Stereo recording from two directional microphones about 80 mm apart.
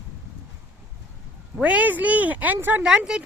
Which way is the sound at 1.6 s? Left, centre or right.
Centre.